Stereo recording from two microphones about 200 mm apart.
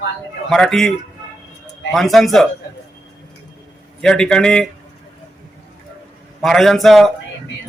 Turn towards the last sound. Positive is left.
turn(degrees=0)  # may be behind; listen again after turning